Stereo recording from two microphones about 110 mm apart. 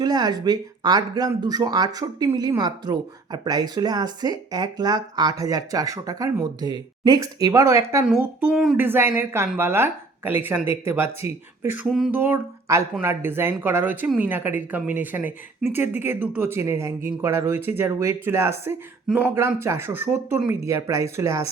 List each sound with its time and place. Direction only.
0.0 s speech: 40° right (ahead or behind)
8.0 s speech: 15° right (ahead or behind)
11.6 s a sound: 20° right (ahead or behind)
11.9 s a sound: 5° right (ahead or behind)
12.1 s speech: 20° right (ahead or behind)
19.3 s speech: 25° right (ahead or behind)